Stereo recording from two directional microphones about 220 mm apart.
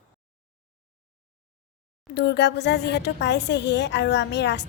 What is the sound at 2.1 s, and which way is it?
A woman's voice, 50° left (ahead or behind).